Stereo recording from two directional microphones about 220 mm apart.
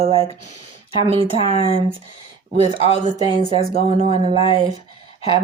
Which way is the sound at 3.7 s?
25° right (ahead or behind).